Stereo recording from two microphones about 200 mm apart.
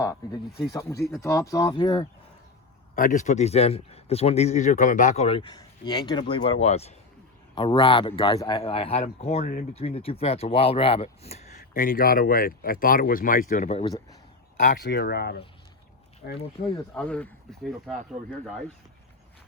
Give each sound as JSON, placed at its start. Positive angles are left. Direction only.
{"t": 0.0, "sound": "speech", "side_deg": 20}
{"t": 2.9, "sound": "speech", "side_deg": 40}
{"t": 14.8, "sound": "speech", "side_deg": 55}
{"t": 16.9, "sound": "speech", "side_deg": 5}